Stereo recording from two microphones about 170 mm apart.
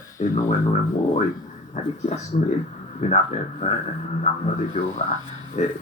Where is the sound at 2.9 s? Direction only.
45° left (ahead or behind).